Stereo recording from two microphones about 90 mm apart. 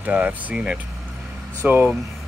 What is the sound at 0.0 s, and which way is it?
Speech, 20° right (ahead or behind).